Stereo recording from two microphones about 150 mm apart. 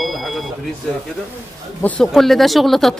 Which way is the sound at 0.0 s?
Centre (ahead or behind).